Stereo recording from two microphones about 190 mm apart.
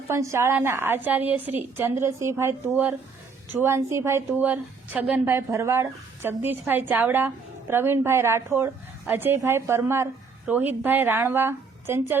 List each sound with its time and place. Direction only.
0.1 s a woman's voice: 15° right (ahead or behind)